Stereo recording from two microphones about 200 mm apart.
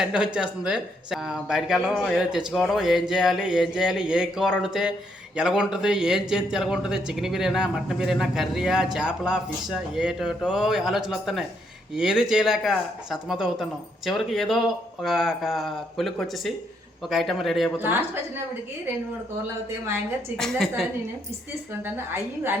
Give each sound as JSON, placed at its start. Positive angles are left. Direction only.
{"t": 0.0, "sound": "speech", "side_deg": -5}
{"t": 17.7, "sound": "a woman's voice", "side_deg": -10}
{"t": 20.3, "sound": "speech", "side_deg": 0}
{"t": 21.9, "sound": "a woman's voice", "side_deg": -10}